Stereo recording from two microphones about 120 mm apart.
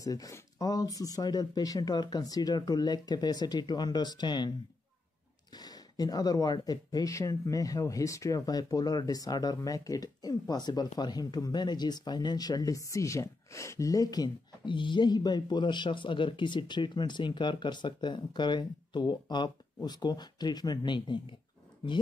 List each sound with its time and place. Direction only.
0.0 s speech: 30° left (ahead or behind)